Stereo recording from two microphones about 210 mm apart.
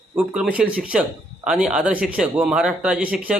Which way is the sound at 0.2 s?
5° right (ahead or behind).